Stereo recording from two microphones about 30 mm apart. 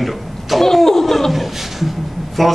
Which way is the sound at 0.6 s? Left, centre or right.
Centre.